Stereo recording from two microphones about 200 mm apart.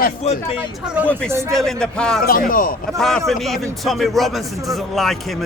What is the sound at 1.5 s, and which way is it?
Speech, 5° left (ahead or behind).